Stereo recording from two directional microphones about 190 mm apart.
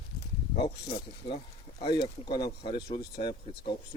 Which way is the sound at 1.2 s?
25° left (ahead or behind).